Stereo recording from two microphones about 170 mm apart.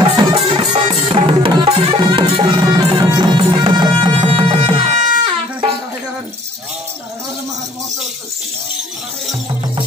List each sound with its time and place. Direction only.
0.0 s music: 30° right (ahead or behind)